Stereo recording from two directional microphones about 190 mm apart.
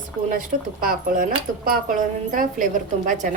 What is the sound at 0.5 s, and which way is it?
Speech, 40° right (ahead or behind).